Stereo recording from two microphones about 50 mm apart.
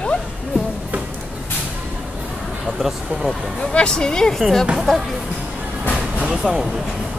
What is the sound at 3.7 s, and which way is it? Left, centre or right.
Speech, centre.